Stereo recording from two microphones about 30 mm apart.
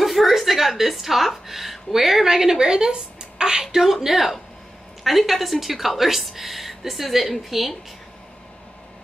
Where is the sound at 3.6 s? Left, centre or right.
Centre.